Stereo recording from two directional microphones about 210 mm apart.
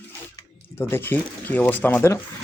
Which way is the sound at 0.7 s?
10° left (ahead or behind).